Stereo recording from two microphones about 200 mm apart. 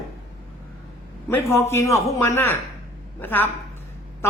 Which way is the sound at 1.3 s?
10° left (ahead or behind).